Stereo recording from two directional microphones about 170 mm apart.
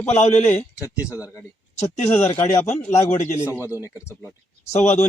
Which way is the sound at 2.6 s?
40° left (ahead or behind).